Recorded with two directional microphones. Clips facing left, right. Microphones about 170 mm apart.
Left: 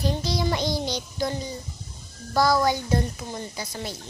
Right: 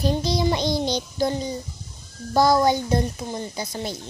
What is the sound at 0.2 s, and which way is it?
Child singing, 20° right (ahead or behind).